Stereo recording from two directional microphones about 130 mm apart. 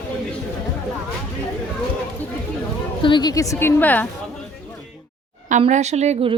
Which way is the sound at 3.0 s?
35° left (ahead or behind).